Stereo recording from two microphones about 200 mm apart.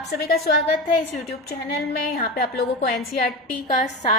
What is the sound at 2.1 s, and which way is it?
Speech, 50° left (ahead or behind).